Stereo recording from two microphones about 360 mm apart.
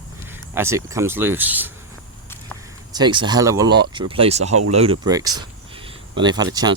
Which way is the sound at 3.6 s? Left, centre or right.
Right.